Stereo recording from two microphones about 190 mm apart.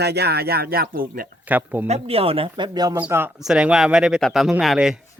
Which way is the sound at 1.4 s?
10° right (ahead or behind).